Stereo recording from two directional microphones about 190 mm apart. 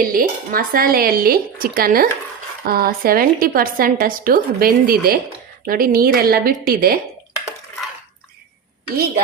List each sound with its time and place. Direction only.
0.0 s a woman's voice: 50° right (ahead or behind)